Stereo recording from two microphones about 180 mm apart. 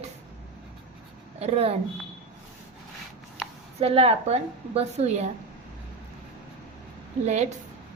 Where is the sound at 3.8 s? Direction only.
35° right (ahead or behind).